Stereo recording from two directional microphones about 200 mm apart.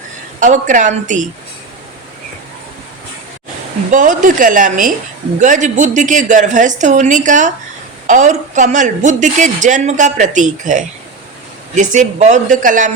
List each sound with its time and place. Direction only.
0.3 s a woman's voice: 40° right (ahead or behind)
3.9 s a woman's voice: 40° right (ahead or behind)